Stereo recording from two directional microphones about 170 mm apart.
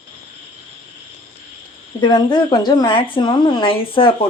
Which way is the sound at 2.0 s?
25° left (ahead or behind).